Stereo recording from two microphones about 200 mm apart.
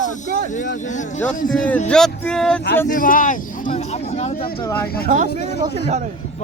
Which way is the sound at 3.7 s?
30° left (ahead or behind).